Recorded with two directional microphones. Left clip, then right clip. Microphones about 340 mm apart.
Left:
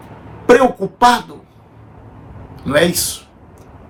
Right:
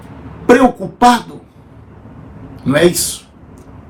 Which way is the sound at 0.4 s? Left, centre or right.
Centre.